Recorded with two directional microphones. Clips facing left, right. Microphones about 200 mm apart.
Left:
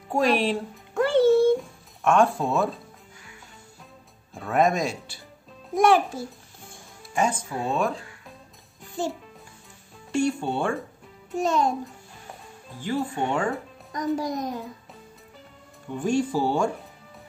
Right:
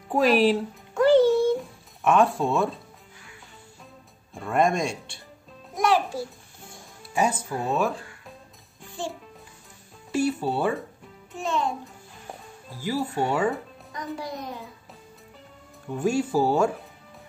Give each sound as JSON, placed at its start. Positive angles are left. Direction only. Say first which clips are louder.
{"t": 0.1, "sound": "speech", "louder": "right 3 dB", "side_deg": 0}
{"t": 0.9, "sound": "music", "louder": "right 1 dB", "side_deg": 55}
{"t": 2.0, "sound": "speech", "louder": "even", "side_deg": 0}
{"t": 4.3, "sound": "speech", "louder": "left 1 dB", "side_deg": 0}
{"t": 7.2, "sound": "speech", "louder": "even", "side_deg": -5}
{"t": 10.1, "sound": "speech", "louder": "even", "side_deg": -5}
{"t": 11.3, "sound": "a child's voice", "louder": "left 4 dB", "side_deg": 40}
{"t": 12.7, "sound": "speech", "louder": "even", "side_deg": -5}
{"t": 13.9, "sound": "a child's voice", "louder": "left 7 dB", "side_deg": 45}
{"t": 15.9, "sound": "speech", "louder": "even", "side_deg": -5}